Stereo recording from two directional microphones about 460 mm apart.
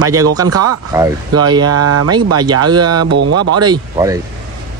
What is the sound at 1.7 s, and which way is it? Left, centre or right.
Speech, right.